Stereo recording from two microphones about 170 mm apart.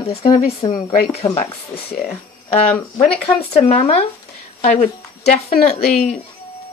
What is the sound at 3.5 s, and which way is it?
A woman's voice, 40° left (ahead or behind).